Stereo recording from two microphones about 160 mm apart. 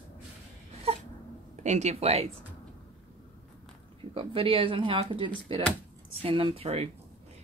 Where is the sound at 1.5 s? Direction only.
45° right (ahead or behind).